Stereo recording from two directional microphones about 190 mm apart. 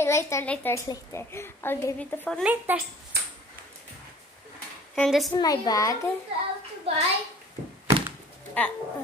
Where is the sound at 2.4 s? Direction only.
10° right (ahead or behind).